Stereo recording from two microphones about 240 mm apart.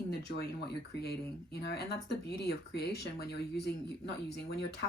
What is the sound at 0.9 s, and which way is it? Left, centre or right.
Speech, left.